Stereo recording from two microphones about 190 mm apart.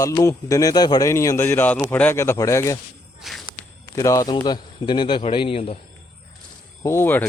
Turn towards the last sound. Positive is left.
turn(degrees=10)  # may be behind; listen again after turning